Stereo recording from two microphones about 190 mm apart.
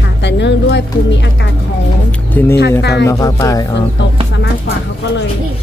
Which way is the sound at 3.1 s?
15° left (ahead or behind).